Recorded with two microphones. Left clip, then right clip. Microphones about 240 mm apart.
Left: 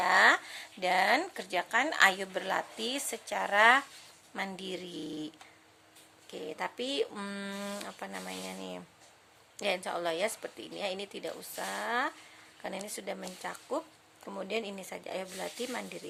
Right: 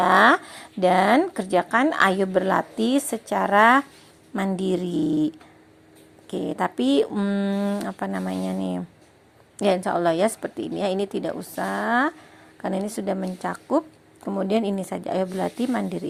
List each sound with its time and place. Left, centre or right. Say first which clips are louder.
0.0 s speech: right 8 dB; centre
6.3 s speech: right 12 dB; right